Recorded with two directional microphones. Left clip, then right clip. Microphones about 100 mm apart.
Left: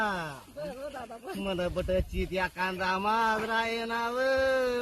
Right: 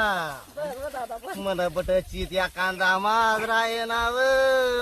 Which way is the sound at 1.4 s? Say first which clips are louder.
Right 6 dB; 40° right (ahead or behind).